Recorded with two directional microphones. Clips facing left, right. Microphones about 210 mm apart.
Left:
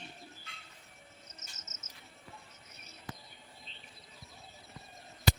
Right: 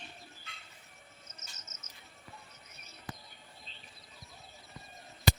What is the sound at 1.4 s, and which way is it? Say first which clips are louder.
Cricket: even; 20° left (ahead or behind).